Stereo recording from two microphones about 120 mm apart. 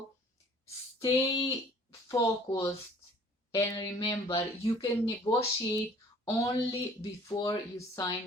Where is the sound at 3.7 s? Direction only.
40° left (ahead or behind).